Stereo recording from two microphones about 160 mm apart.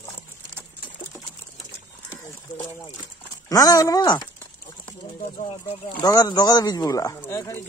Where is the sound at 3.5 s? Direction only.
20° left (ahead or behind).